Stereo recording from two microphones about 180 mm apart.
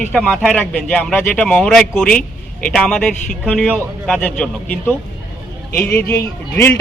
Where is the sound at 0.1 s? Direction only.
5° left (ahead or behind).